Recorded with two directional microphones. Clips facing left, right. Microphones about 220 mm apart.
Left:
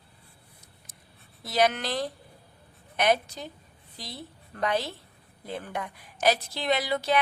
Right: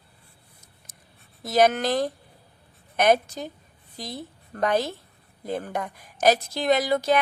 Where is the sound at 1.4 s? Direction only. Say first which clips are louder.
Right 5 dB; 45° right (ahead or behind).